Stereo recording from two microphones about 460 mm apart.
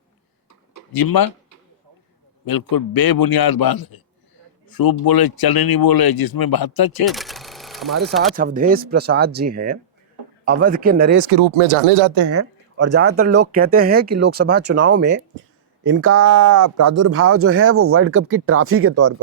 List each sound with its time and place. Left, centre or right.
0.7 s a sound: left
2.5 s speech: left
7.0 s a sound: centre
8.4 s speech: centre
11.3 s speech: right
12.3 s speech: right